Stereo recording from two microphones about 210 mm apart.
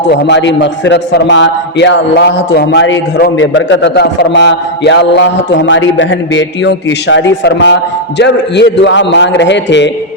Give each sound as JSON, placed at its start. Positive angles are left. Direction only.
{"t": 0.0, "sound": "a man's voice", "side_deg": 55}